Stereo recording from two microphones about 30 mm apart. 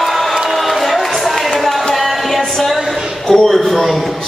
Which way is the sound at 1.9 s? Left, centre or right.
Centre.